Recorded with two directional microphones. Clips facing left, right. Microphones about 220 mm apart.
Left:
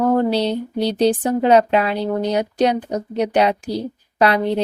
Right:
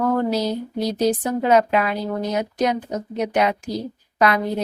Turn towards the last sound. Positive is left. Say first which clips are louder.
# left 3 dB
turn(degrees=30)  # may be behind; listen again after turning